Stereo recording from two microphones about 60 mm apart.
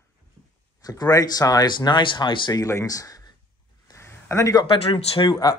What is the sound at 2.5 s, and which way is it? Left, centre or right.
Speech, left.